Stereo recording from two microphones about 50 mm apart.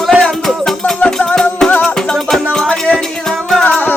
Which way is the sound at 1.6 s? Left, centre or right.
Centre.